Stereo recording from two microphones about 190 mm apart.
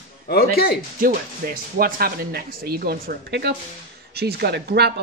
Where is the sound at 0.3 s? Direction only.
55° left (ahead or behind).